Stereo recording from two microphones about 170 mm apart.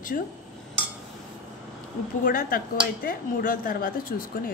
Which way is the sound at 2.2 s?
55° left (ahead or behind).